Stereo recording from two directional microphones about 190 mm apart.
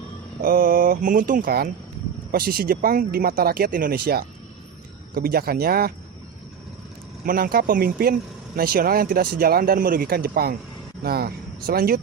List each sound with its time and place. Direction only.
0.4 s speech: 50° right (ahead or behind)
7.3 s speech: 50° right (ahead or behind)